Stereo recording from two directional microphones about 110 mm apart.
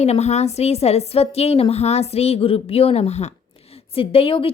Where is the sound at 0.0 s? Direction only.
80° left.